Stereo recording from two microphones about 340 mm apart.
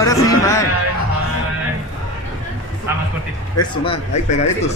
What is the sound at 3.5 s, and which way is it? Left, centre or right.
Speech, centre.